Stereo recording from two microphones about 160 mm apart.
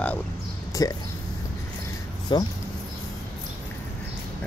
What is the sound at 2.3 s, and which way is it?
Speech, 30° left (ahead or behind).